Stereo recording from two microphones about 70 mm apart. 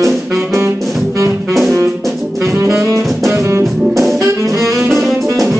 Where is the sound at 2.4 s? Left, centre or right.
Right.